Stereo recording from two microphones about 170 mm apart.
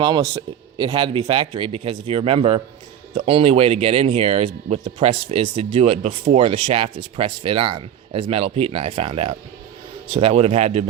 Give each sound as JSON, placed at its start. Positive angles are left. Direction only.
{"t": 0.0, "sound": "speech", "side_deg": -25}